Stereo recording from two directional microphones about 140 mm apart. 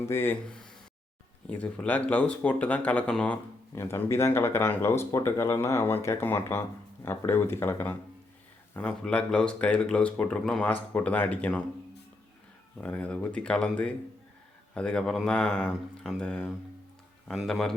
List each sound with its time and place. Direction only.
0.0 s speech: 15° left (ahead or behind)
0.4 s speech: 5° left (ahead or behind)
3.8 s speech: 20° left (ahead or behind)
12.8 s speech: 10° left (ahead or behind)